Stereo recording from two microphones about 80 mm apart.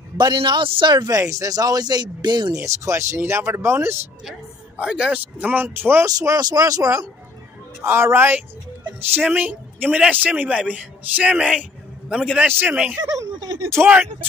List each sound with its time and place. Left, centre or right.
0.2 s speech: right
1.2 s speech: right
2.5 s speech: right
4.7 s a man's voice: centre; by 6.0 s right
6.0 s speech: right
7.8 s a man's voice: right; by 12.4 s centre
12.4 s a man's voice: right
12.7 s speech: centre
13.1 s a sound: right
13.8 s a man's voice: right